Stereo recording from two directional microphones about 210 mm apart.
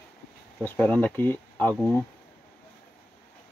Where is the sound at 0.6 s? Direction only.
5° left (ahead or behind).